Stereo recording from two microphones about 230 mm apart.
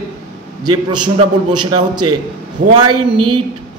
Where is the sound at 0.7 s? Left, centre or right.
Centre.